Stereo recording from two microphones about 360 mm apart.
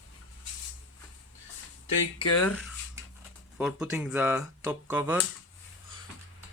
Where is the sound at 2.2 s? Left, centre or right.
Centre.